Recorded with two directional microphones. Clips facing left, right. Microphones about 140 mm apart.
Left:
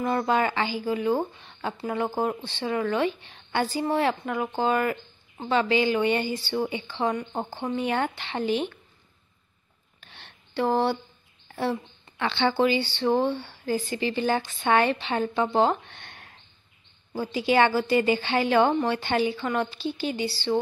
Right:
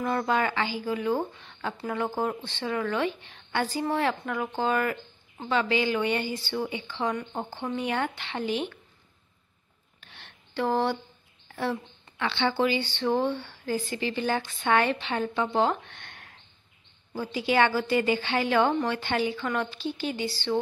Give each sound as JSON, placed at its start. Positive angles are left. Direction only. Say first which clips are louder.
{"t": 0.0, "sound": "a woman's voice", "louder": "left 2 dB", "side_deg": 25}
{"t": 10.1, "sound": "a sound", "louder": "left 3 dB", "side_deg": 30}
{"t": 10.7, "sound": "a woman's voice", "louder": "left 2 dB", "side_deg": 20}
{"t": 12.2, "sound": "speech", "louder": "left 2 dB", "side_deg": 40}
{"t": 12.5, "sound": "a woman's voice", "louder": "left 3 dB", "side_deg": 25}
{"t": 14.3, "sound": "speech", "louder": "left 3 dB", "side_deg": 40}
{"t": 14.7, "sound": "a woman's voice", "louder": "left 2 dB", "side_deg": 25}
{"t": 17.3, "sound": "a woman's voice", "louder": "left 2 dB", "side_deg": 25}